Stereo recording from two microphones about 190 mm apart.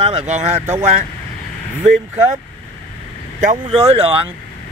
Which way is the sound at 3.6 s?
30° right (ahead or behind).